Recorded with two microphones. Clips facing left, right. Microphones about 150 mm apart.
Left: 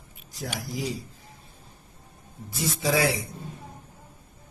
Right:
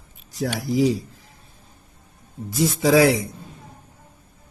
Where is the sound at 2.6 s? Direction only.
90° right.